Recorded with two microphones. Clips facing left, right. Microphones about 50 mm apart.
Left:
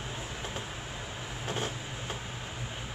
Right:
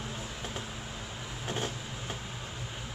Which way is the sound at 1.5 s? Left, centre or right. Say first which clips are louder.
Even; centre.